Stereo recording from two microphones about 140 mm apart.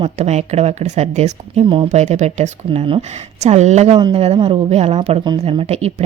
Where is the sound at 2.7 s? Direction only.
40° right (ahead or behind).